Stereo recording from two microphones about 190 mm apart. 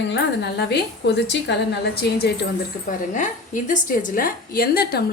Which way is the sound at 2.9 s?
40° left (ahead or behind).